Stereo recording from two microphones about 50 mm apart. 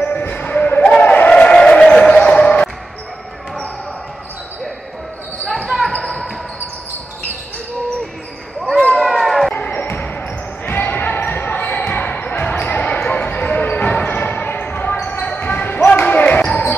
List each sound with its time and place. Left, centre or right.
0.0 s basketball bounce: left
0.8 s a sound: left
5.7 s basketball bounce: centre
8.9 s run: centre
9.5 s basketball bounce: left